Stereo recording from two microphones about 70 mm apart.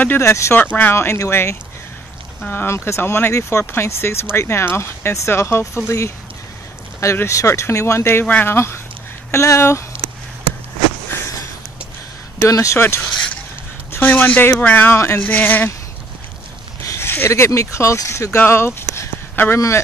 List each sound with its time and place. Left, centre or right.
0.2 s speech: left
0.6 s speech: left
0.9 s speech: left
7.2 s speech: left
11.1 s a sound: left
12.4 s speech: left
12.8 s speech: left
16.8 s a sound: left
17.5 s speech: left
18.8 s a sound: left
19.5 s speech: left